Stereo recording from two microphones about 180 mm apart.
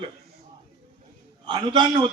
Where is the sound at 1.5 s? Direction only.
25° right (ahead or behind).